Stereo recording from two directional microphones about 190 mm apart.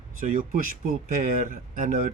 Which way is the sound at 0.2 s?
45° right (ahead or behind).